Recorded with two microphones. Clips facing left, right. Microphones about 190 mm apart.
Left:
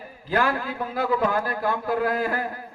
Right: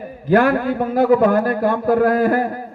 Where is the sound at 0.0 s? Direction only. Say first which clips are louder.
Right 9 dB; 55° right (ahead or behind).